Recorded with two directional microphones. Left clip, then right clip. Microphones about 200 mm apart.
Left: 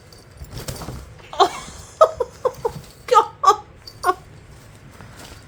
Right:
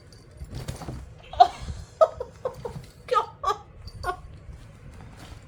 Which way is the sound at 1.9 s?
50° left (ahead or behind).